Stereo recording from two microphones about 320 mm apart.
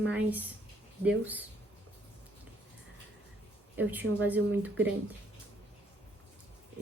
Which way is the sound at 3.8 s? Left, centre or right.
Centre.